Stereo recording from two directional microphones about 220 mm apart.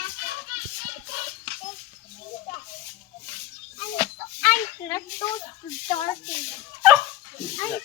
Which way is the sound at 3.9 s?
10° left (ahead or behind).